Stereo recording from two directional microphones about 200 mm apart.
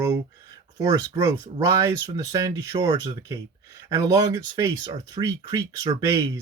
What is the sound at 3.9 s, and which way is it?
Speech, 15° right (ahead or behind).